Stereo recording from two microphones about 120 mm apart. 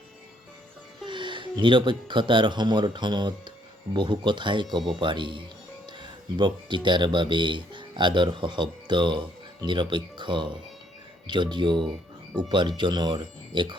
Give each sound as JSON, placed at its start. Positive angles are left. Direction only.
{"t": 1.0, "sound": "speech", "side_deg": -40}